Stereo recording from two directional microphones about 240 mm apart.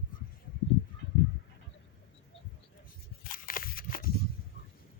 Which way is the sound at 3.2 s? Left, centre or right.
Left.